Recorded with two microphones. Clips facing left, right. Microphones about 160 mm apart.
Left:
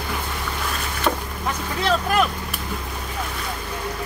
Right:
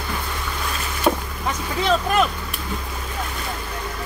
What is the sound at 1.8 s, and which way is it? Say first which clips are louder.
Speech: right 1 dB; centre (ahead or behind).